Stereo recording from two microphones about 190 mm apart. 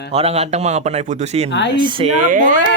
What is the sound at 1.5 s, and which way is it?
Speech, 70° left (ahead or behind).